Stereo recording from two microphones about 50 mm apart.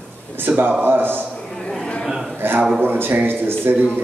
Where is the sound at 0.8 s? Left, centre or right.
Right.